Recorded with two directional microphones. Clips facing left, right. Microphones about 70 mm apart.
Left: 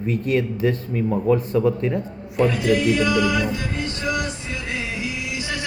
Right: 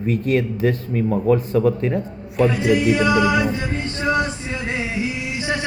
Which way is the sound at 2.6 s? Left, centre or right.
Right.